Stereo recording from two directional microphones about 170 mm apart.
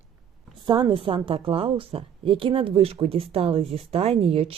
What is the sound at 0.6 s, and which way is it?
A woman's voice, 25° right (ahead or behind).